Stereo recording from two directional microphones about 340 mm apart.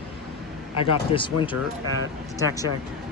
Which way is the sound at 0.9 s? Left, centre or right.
Centre.